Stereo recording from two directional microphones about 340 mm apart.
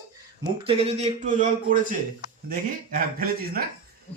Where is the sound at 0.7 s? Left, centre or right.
Centre.